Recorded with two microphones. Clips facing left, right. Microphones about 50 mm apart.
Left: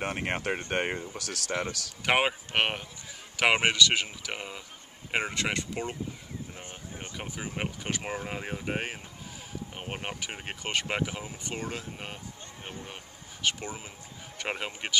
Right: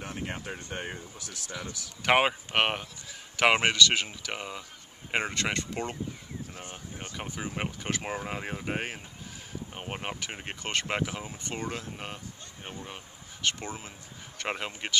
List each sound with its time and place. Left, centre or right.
0.0 s speech: left
1.1 s speech: left
2.0 s speech: centre
6.6 s a sound: centre
7.2 s speech: centre